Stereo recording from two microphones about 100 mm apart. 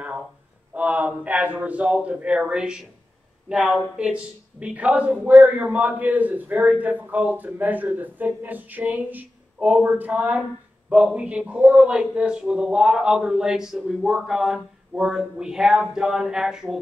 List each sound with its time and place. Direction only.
0.7 s speech: 15° right (ahead or behind)